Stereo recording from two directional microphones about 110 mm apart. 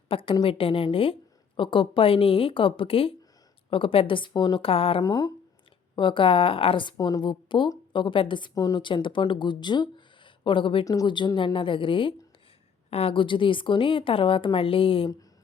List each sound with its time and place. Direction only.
0.1 s a woman's voice: 55° left (ahead or behind)
4.6 s speech: 60° left (ahead or behind)
5.0 s speech: 35° left (ahead or behind)
6.0 s a woman's voice: 50° left (ahead or behind)
6.9 s a woman's voice: 35° left (ahead or behind)
12.9 s a woman's voice: 60° left (ahead or behind)